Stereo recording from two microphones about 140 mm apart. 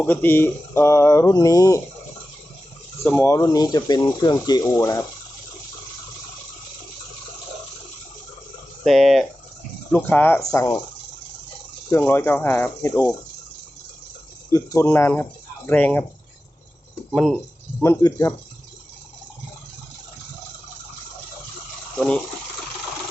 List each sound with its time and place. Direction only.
0.0 s speech: 15° left (ahead or behind)
3.0 s speech: 15° left (ahead or behind)
8.8 s speech: centre (ahead or behind)
9.9 s speech: 15° left (ahead or behind)
11.9 s speech: 15° left (ahead or behind)
14.5 s speech: 25° left (ahead or behind)
17.1 s speech: centre (ahead or behind)
17.7 s speech: 15° left (ahead or behind)